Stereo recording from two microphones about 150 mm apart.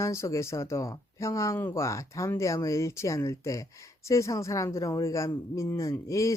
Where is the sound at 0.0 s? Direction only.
20° left (ahead or behind).